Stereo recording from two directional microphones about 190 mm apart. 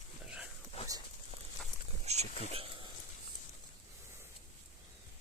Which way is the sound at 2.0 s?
35° right (ahead or behind).